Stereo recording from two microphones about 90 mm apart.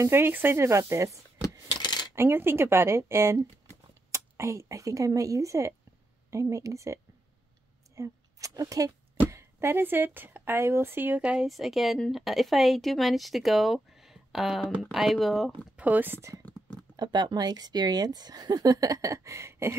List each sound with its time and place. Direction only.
0.0 s speech: 25° right (ahead or behind)
1.7 s coin: 50° left (ahead or behind)
2.1 s a woman's voice: 25° right (ahead or behind)
11.4 s a woman's voice: centre (ahead or behind)
15.7 s speech: 20° right (ahead or behind)
16.9 s speech: 55° right (ahead or behind); by 19.7 s 35° right (ahead or behind)